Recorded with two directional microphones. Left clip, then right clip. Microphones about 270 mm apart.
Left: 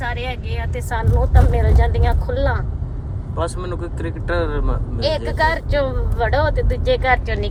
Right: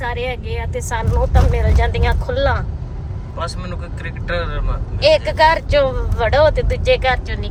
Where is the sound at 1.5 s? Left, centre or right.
Centre.